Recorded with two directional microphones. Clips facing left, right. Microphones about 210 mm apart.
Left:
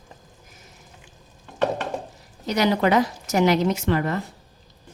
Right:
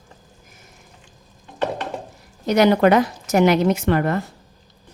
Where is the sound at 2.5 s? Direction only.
55° right (ahead or behind).